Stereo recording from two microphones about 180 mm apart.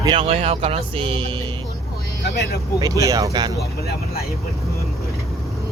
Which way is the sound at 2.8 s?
20° right (ahead or behind).